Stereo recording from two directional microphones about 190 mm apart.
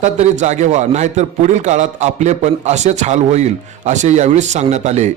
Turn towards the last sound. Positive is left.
turn(degrees=-40)  # may be behind; listen again after turning